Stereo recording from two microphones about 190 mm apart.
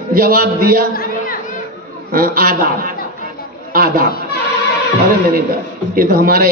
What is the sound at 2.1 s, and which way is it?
A man's voice, 50° right (ahead or behind).